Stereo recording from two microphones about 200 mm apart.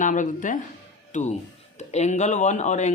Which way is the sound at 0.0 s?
40° left (ahead or behind).